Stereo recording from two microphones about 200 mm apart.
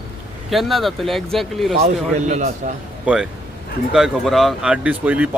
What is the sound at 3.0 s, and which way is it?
A man's voice, 5° right (ahead or behind).